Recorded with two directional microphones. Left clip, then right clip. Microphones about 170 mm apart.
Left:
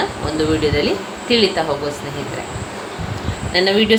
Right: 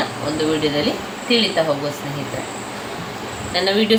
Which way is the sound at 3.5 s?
40° left (ahead or behind).